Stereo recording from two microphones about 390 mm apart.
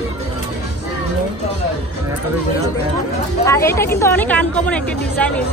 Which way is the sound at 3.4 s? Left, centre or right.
Centre.